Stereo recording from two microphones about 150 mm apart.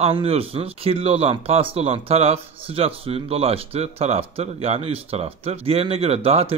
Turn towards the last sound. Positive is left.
turn(degrees=-40)  # may be behind; listen again after turning